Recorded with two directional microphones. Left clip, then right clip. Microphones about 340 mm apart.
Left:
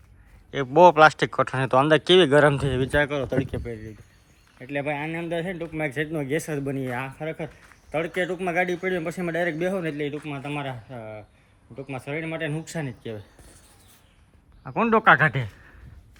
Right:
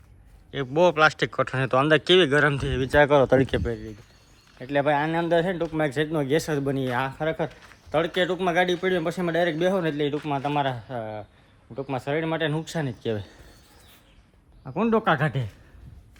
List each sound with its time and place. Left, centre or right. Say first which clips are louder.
0.5 s speech: left 6 dB; centre
3.1 s speech: right 9 dB; centre
4.7 s speech: right 6 dB; centre
14.6 s speech: left 4 dB; centre